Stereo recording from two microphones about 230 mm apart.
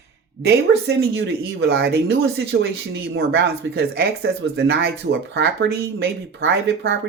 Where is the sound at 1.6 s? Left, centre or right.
Right.